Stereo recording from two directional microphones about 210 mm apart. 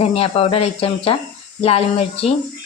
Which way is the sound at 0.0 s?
30° left (ahead or behind).